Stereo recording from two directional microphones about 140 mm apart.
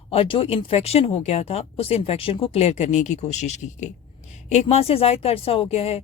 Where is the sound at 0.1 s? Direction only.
40° left (ahead or behind).